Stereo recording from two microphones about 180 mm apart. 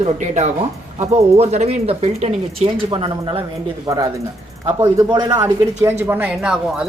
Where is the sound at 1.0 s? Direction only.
35° right (ahead or behind).